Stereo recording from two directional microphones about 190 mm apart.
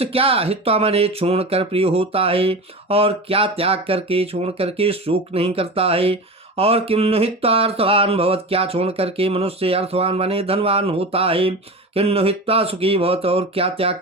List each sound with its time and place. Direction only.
0.0 s speech: 30° right (ahead or behind)